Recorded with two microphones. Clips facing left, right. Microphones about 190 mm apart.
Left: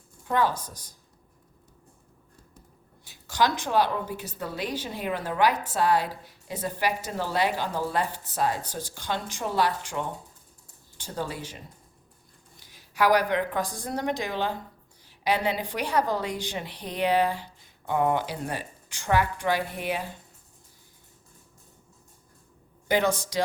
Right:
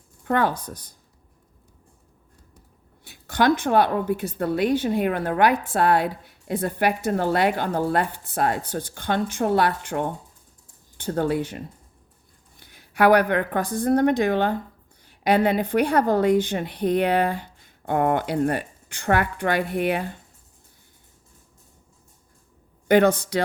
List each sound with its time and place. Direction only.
0.3 s a woman's voice: 60° right (ahead or behind)
3.0 s a woman's voice: 60° right (ahead or behind)
22.9 s a woman's voice: 60° right (ahead or behind)